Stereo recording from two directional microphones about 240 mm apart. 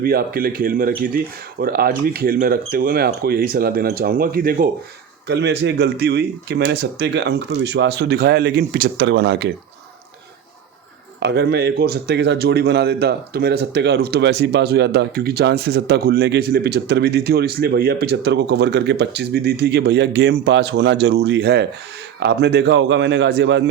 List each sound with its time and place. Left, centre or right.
0.0 s speech: right
5.3 s speech: right
11.2 s speech: right